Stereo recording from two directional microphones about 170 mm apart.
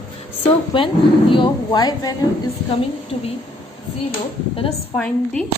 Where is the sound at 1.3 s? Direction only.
25° left (ahead or behind).